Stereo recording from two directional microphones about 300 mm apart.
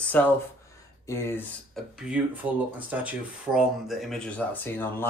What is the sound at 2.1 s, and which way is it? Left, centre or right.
Speech, centre.